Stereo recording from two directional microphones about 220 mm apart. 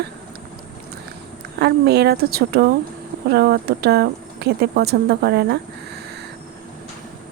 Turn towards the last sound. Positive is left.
turn(degrees=-45)  # may be behind; listen again after turning